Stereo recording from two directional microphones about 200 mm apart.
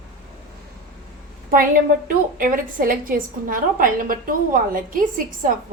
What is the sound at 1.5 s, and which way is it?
A woman's voice, 45° right (ahead or behind).